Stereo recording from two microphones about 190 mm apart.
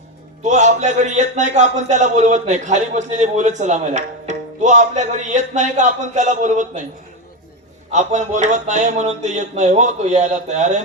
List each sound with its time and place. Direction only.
0.4 s a man's voice: 40° right (ahead or behind)
7.9 s a man's voice: 40° right (ahead or behind)